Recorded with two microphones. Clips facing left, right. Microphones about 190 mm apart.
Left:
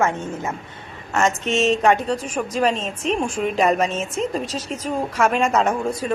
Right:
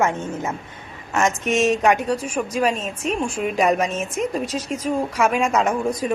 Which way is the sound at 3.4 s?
10° right (ahead or behind).